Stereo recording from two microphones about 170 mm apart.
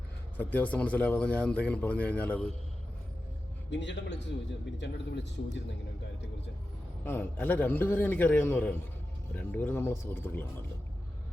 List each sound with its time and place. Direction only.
0.3 s a man's voice: 10° left (ahead or behind)
3.7 s a man's voice: 90° left
7.0 s a man's voice: 10° left (ahead or behind)